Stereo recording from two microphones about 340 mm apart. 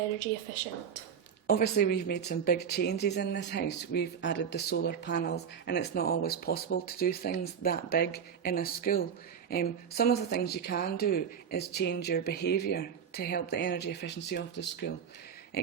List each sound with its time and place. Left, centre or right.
1.5 s speech: left